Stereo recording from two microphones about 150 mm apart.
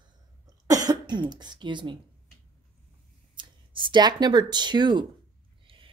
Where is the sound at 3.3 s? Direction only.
30° right (ahead or behind).